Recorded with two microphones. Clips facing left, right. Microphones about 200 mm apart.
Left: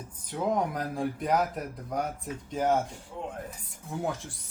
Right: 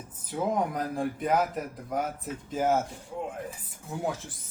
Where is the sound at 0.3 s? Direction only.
Centre (ahead or behind).